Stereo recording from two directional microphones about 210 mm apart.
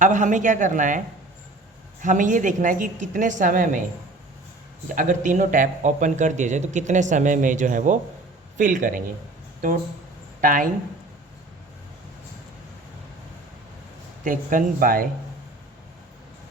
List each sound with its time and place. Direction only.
0.0 s a man's voice: 35° right (ahead or behind)
4.9 s a man's voice: 35° right (ahead or behind)
10.4 s a man's voice: 40° right (ahead or behind)
14.3 s a man's voice: 40° right (ahead or behind)